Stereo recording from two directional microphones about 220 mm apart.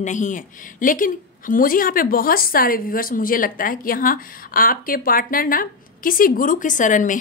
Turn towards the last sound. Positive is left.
turn(degrees=35)  # may be behind; listen again after turning